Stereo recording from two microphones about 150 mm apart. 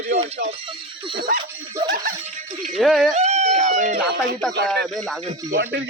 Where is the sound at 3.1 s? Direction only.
45° right (ahead or behind).